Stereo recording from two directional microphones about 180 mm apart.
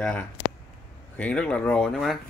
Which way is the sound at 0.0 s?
5° left (ahead or behind).